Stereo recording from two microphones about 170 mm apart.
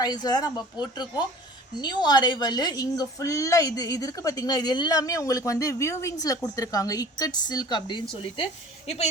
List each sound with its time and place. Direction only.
0.0 s a woman's voice: 25° left (ahead or behind)